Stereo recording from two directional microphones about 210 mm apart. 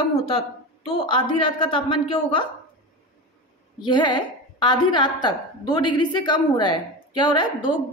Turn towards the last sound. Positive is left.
turn(degrees=25)  # may be behind; listen again after turning